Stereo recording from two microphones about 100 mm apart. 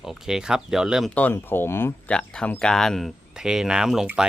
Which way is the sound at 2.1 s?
10° left (ahead or behind).